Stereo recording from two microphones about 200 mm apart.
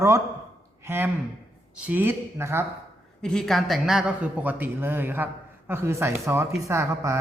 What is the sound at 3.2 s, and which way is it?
A man's voice, 5° left (ahead or behind).